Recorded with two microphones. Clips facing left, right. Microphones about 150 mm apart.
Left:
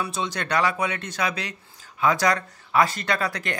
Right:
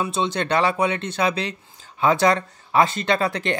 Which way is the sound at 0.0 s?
25° right (ahead or behind).